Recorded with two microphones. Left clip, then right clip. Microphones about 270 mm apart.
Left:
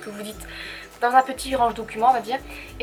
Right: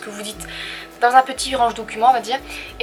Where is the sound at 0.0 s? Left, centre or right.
Centre.